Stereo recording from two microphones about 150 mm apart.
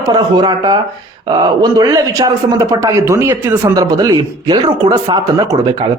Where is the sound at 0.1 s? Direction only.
30° right (ahead or behind).